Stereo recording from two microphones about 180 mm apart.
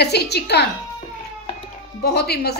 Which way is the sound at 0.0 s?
65° left (ahead or behind).